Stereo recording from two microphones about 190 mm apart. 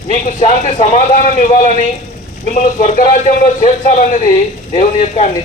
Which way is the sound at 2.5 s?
40° left (ahead or behind).